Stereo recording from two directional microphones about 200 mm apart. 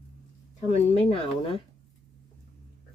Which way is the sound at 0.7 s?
30° left (ahead or behind).